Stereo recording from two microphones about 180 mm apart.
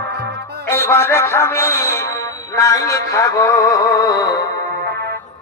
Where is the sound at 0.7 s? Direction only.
15° left (ahead or behind).